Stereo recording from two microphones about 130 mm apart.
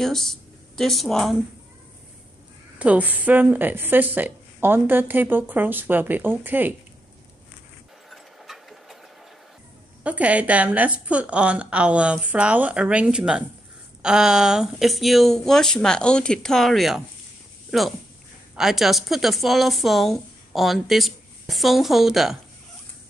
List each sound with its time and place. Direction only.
0.0 s speech: 5° left (ahead or behind)
2.8 s a woman's voice: 10° right (ahead or behind)
8.1 s a sound: centre (ahead or behind)
10.0 s a woman's voice: 10° right (ahead or behind)